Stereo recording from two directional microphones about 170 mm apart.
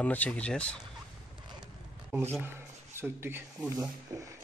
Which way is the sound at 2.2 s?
15° right (ahead or behind).